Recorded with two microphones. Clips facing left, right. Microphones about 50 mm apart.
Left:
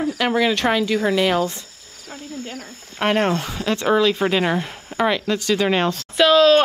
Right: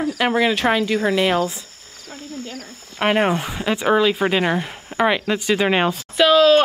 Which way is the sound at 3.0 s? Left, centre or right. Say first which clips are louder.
Right 1 dB; centre.